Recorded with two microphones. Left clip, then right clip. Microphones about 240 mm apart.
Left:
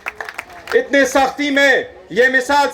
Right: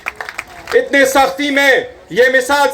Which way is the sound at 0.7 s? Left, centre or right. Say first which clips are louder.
Right 3 dB; left.